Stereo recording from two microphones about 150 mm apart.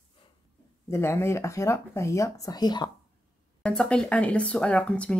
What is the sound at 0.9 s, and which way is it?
Speech, 15° left (ahead or behind).